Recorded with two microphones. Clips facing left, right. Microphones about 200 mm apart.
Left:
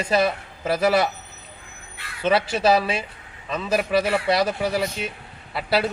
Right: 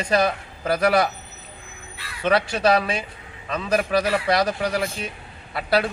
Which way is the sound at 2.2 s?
5° left (ahead or behind).